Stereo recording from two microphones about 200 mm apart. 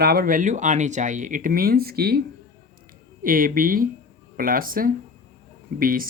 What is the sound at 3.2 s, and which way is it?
Speech, 45° right (ahead or behind).